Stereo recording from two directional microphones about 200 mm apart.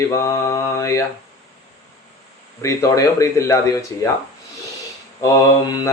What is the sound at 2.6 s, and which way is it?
Mantra, 15° left (ahead or behind).